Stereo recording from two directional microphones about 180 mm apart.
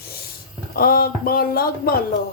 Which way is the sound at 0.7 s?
55° left (ahead or behind).